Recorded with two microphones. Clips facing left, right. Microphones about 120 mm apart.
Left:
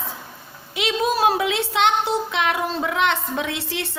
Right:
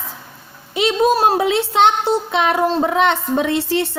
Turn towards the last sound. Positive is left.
turn(degrees=-35)  # may be behind; listen again after turning